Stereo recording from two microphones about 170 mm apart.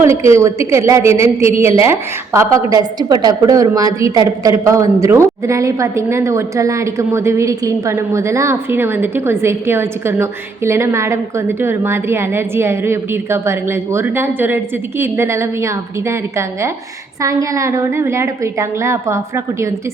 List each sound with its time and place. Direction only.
0.0 s a woman's voice: 15° right (ahead or behind)
17.2 s a woman's voice: 20° right (ahead or behind)